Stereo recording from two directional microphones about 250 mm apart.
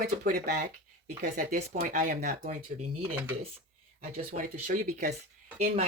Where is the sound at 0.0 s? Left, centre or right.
Right.